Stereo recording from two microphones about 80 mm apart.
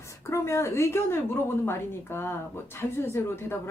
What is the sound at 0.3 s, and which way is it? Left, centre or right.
A woman's voice, left.